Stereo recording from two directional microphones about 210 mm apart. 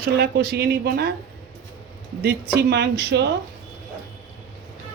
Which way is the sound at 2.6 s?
50° right (ahead or behind).